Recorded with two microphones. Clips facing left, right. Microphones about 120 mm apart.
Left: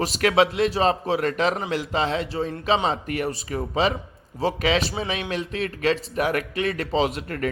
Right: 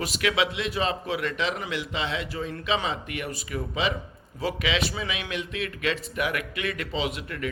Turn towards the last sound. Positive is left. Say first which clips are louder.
# left 7 dB
turn(degrees=45)  # may be behind; listen again after turning